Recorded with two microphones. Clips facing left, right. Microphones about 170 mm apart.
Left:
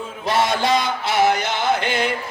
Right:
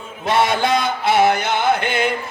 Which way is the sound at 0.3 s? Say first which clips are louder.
Right 2 dB; 60° right (ahead or behind).